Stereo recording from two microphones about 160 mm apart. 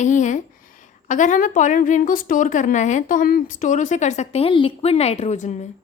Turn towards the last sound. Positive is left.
turn(degrees=45)  # may be behind; listen again after turning